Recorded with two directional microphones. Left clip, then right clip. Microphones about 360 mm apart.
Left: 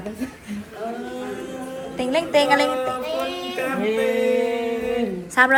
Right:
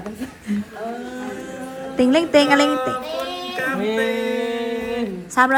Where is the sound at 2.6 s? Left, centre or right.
Centre.